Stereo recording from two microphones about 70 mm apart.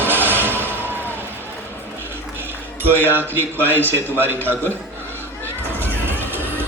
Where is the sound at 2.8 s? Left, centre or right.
Right.